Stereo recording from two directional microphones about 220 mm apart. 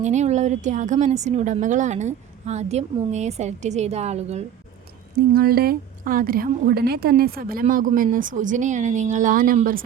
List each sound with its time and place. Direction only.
0.0 s a woman's voice: 30° right (ahead or behind)
5.3 s a woman's voice: 45° right (ahead or behind)